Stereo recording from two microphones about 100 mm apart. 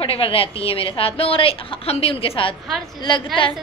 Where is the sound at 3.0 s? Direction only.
55° left (ahead or behind).